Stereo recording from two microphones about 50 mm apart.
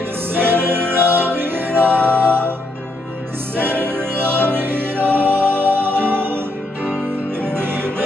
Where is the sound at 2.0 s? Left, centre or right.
Left.